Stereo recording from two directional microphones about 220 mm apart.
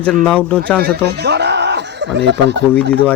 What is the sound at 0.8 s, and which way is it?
Chuckle, 45° right (ahead or behind).